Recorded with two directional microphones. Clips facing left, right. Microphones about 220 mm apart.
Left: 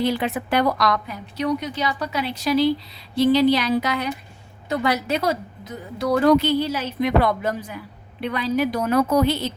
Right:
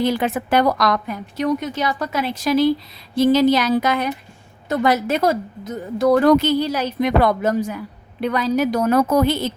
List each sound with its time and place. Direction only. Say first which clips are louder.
0.0 s a woman's voice: right 3 dB; 45° right (ahead or behind)